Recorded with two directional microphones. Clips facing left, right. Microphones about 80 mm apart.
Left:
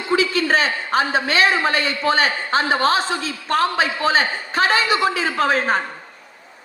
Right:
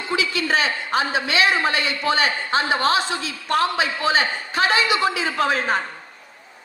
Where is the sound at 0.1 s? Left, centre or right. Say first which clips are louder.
Left 4 dB; left.